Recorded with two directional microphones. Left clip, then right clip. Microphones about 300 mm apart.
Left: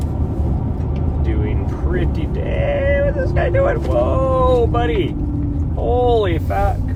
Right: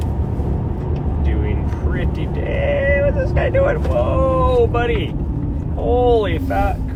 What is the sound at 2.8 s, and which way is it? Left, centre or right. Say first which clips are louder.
Vehicle: right 1 dB; left.